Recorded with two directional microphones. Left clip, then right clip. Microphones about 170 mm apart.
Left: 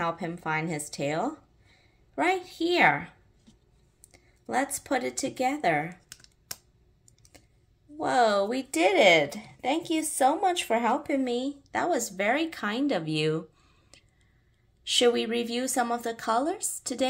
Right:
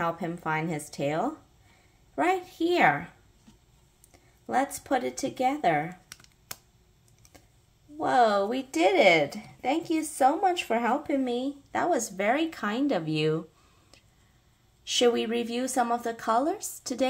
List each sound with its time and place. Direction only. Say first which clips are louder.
0.0 s a woman's voice: right 1 dB; centre (ahead or behind)
4.1 s speech: right 2 dB; centre (ahead or behind)
8.0 s a woman's voice: right 1 dB; centre (ahead or behind)